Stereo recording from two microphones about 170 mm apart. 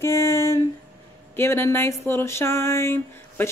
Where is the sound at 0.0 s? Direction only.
15° left (ahead or behind).